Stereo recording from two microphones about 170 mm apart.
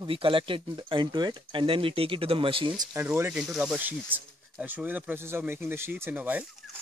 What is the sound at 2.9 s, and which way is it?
Speech, 15° right (ahead or behind).